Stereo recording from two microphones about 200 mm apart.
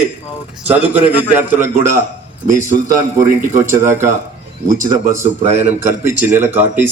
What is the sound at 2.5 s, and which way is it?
Speech, 40° right (ahead or behind).